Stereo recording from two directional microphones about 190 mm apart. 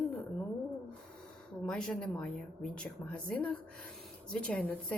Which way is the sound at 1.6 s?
5° left (ahead or behind).